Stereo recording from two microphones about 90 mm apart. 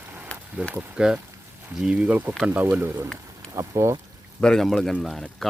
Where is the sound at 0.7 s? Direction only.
10° right (ahead or behind); by 3.9 s 35° right (ahead or behind).